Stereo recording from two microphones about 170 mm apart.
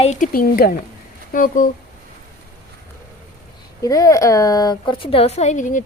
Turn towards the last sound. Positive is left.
turn(degrees=50)  # may be behind; listen again after turning